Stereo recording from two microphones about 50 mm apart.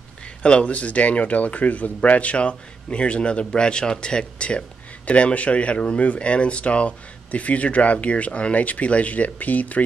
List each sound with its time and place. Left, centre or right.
0.4 s speech: left